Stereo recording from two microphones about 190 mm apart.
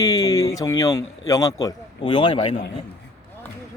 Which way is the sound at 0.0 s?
20° left (ahead or behind).